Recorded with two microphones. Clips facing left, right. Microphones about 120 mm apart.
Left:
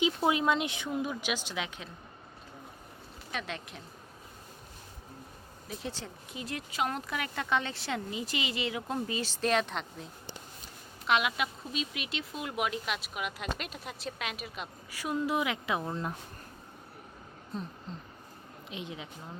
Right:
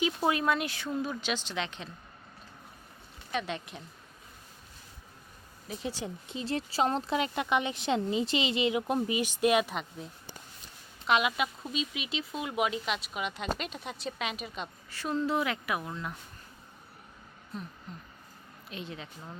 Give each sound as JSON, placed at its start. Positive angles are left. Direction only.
{"t": 0.3, "sound": "a woman's voice", "side_deg": 20}
{"t": 3.3, "sound": "speech", "side_deg": 0}
{"t": 5.6, "sound": "speech", "side_deg": 0}
{"t": 6.2, "sound": "a woman's voice", "side_deg": -25}
{"t": 17.9, "sound": "a sound", "side_deg": 30}
{"t": 18.7, "sound": "a woman's voice", "side_deg": 15}